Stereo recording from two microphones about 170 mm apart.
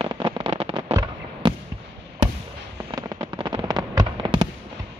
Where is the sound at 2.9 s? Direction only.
25° right (ahead or behind).